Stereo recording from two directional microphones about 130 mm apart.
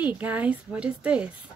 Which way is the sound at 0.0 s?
10° right (ahead or behind).